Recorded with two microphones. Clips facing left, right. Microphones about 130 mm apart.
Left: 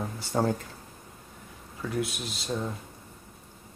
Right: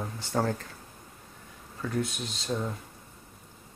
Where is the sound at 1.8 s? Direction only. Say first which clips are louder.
Even; 5° left (ahead or behind).